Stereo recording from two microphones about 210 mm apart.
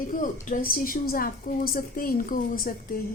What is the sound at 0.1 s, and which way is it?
A woman's voice, 40° left (ahead or behind).